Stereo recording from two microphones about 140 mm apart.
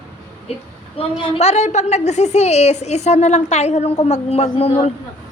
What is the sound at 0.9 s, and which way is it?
A woman's voice, 40° left (ahead or behind).